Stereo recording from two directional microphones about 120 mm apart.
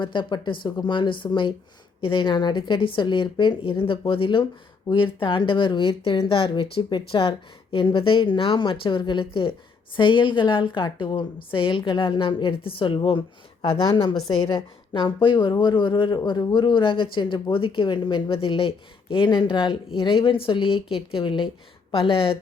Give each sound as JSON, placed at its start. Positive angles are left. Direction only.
{"t": 0.0, "sound": "a woman's voice", "side_deg": 40}